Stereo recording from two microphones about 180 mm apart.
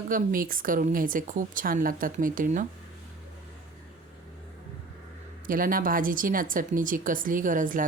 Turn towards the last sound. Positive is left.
turn(degrees=-45)  # may be behind; listen again after turning